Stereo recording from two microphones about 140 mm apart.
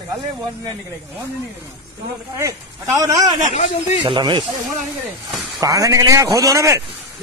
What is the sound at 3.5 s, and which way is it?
Speech, 50° left (ahead or behind).